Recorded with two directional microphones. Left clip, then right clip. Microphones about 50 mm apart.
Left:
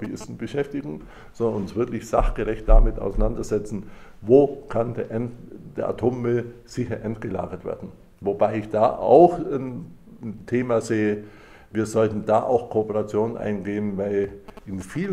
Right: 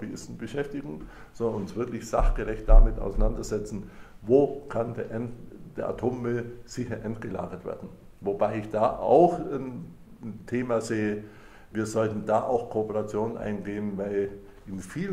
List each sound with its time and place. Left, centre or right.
0.0 s speech: centre